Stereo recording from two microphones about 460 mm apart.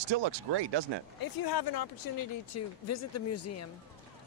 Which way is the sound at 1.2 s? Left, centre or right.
Left.